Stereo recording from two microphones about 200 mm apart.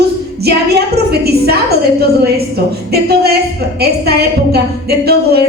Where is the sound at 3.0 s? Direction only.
50° right (ahead or behind).